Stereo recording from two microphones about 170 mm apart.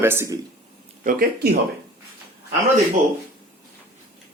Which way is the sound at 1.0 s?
55° right (ahead or behind).